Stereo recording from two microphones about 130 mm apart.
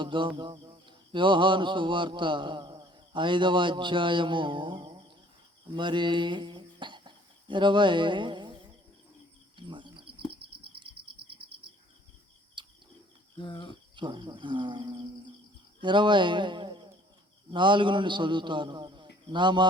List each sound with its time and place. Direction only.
0.0 s speech: 40° right (ahead or behind)
0.9 s mantra: 40° right (ahead or behind)
5.7 s a sound: 35° right (ahead or behind)
9.6 s insect: 35° right (ahead or behind)
12.6 s cricket: 35° right (ahead or behind)
13.4 s speech: 40° left (ahead or behind)
13.9 s a man's voice: 35° right (ahead or behind)